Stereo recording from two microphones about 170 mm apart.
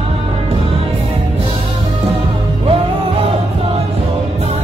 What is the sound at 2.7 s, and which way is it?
Music, 35° right (ahead or behind).